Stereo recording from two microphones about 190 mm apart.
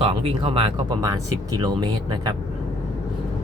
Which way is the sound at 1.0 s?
20° right (ahead or behind).